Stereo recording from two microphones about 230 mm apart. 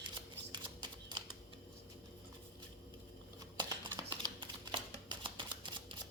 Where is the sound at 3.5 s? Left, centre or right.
Centre.